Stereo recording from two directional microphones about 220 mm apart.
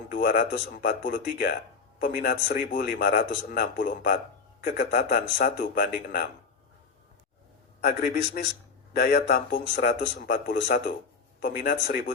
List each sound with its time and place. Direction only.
0.1 s a man's voice: 40° left (ahead or behind)
7.8 s speech: 45° left (ahead or behind)